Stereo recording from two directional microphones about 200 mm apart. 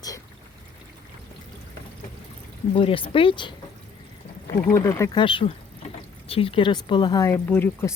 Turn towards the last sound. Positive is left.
turn(degrees=10)  # may be behind; listen again after turning